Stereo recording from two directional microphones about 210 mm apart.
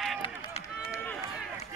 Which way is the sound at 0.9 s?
5° left (ahead or behind).